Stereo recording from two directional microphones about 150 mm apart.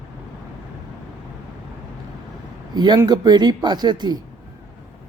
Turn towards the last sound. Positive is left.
turn(degrees=-30)  # may be behind; listen again after turning